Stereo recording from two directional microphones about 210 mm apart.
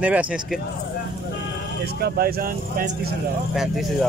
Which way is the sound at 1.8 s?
45° right (ahead or behind).